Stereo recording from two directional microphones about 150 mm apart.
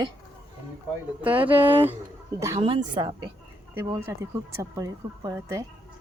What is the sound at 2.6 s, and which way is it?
Speech, 35° right (ahead or behind).